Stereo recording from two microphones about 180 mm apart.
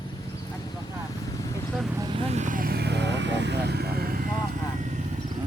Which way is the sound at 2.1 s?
35° right (ahead or behind).